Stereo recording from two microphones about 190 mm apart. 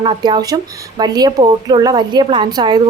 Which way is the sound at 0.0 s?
20° right (ahead or behind).